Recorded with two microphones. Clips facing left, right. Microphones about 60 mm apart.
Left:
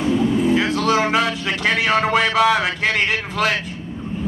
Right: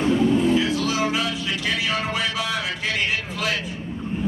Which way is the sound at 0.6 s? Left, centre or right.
Left.